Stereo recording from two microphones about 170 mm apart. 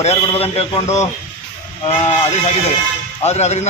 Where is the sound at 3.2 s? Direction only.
40° left (ahead or behind).